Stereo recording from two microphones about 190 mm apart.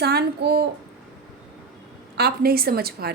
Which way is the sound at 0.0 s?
60° right (ahead or behind).